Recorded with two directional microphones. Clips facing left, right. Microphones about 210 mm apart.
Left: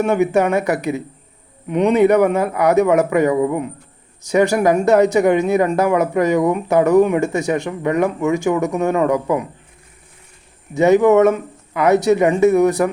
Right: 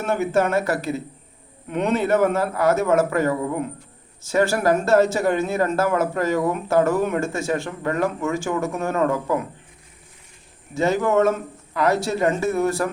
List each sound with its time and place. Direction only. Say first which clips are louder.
0.0 s speech: left 5 dB; 15° left (ahead or behind)
10.8 s speech: left 8 dB; 20° left (ahead or behind)